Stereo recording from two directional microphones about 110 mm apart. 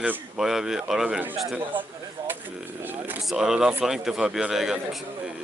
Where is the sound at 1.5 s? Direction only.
15° right (ahead or behind).